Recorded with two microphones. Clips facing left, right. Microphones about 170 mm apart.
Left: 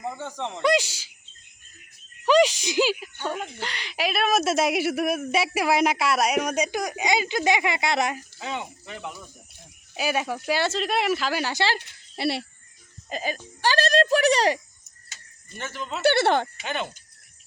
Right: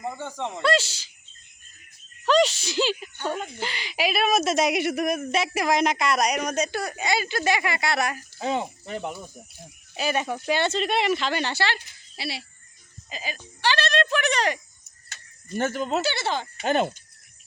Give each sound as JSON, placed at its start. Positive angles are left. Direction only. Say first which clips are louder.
{"t": 0.0, "sound": "speech", "louder": "even", "side_deg": -5}
{"t": 0.6, "sound": "speech", "louder": "left 2 dB", "side_deg": 15}
{"t": 2.2, "sound": "speech", "louder": "left 2 dB", "side_deg": 10}
{"t": 8.4, "sound": "speech", "louder": "right 6 dB", "side_deg": -35}
{"t": 9.9, "sound": "speech", "louder": "even", "side_deg": 10}
{"t": 11.8, "sound": "speech", "louder": "left 8 dB", "side_deg": 60}
{"t": 15.1, "sound": "a sound", "louder": "right 13 dB", "side_deg": -55}
{"t": 16.0, "sound": "speech", "louder": "left 12 dB", "side_deg": 60}
{"t": 16.6, "sound": "speech", "louder": "right 8 dB", "side_deg": -40}